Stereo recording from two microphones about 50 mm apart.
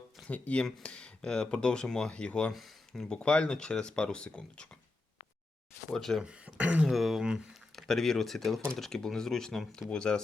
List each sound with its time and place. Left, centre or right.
0.3 s speech: left
2.5 s speech: centre
3.2 s speech: centre
5.9 s speech: centre
6.2 s speech: right
6.8 s speech: centre